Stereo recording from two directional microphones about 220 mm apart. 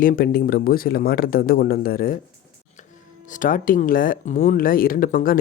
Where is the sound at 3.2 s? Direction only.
35° left (ahead or behind).